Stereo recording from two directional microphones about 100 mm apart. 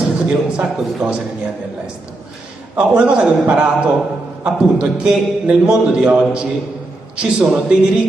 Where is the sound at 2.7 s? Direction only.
10° right (ahead or behind).